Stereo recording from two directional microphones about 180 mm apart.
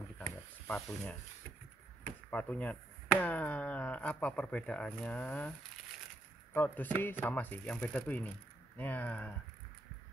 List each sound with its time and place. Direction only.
0.7 s speech: 5° left (ahead or behind)
2.3 s speech: 10° left (ahead or behind)
6.5 s speech: 10° left (ahead or behind)